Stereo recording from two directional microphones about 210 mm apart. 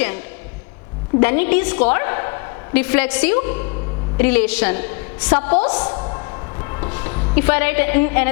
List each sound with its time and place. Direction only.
1.2 s a woman's voice: 10° left (ahead or behind)
5.9 s music: 25° left (ahead or behind)